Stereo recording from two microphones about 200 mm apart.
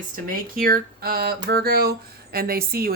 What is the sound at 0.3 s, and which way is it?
Speech, 45° right (ahead or behind).